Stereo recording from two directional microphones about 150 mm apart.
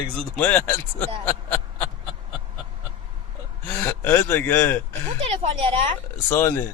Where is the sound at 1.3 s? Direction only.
15° left (ahead or behind).